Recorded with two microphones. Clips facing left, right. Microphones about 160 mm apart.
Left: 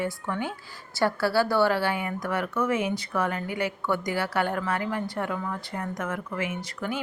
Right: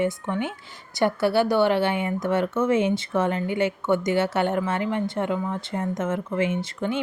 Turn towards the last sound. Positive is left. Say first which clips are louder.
# right 5 dB
turn(degrees=-25)  # may be behind; listen again after turning